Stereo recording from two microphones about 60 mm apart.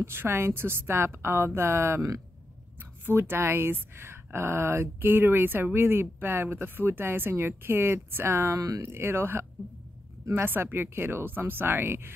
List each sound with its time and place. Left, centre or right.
0.0 s a woman's voice: right
3.1 s speech: right
8.5 s speech: right
8.8 s a woman's voice: right